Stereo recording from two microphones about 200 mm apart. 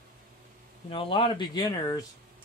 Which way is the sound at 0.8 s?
25° left (ahead or behind).